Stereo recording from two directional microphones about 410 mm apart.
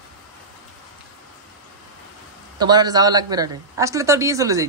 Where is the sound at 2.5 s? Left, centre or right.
Centre.